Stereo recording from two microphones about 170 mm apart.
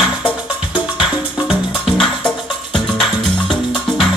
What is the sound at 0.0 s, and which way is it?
Music, 5° right (ahead or behind).